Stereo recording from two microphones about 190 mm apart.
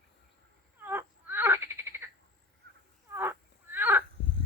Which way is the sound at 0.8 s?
10° right (ahead or behind).